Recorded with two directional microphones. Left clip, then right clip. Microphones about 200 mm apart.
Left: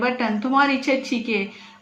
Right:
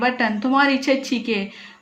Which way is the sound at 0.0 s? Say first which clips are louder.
Right 2 dB; 45° right (ahead or behind).